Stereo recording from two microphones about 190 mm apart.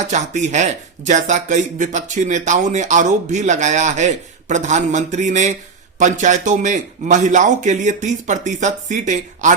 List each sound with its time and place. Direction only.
0.1 s speech: 40° right (ahead or behind)